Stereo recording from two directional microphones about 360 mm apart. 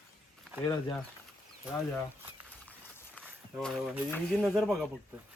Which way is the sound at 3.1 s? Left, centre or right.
Centre.